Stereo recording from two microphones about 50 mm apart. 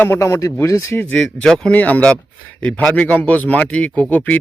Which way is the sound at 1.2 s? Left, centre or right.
Centre.